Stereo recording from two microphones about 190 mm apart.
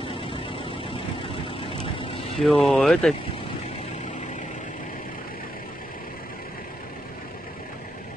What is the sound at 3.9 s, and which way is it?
Vehicle, 35° left (ahead or behind).